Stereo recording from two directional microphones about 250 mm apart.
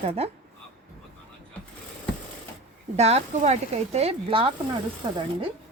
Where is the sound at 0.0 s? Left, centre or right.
Right.